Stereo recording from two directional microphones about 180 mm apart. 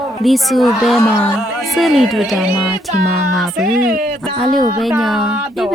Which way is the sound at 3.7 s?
50° right (ahead or behind).